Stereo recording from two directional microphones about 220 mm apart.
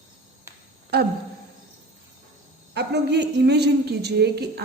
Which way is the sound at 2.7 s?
50° right (ahead or behind).